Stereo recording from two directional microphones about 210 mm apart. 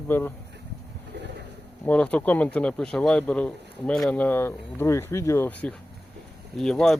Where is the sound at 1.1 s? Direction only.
55° right (ahead or behind).